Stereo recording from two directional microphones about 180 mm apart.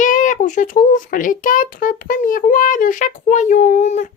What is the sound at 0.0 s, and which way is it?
Speech, 45° left (ahead or behind).